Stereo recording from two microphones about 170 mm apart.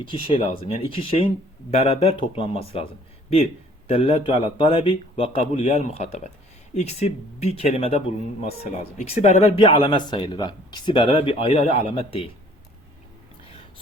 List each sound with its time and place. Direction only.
0.0 s speech: 30° left (ahead or behind)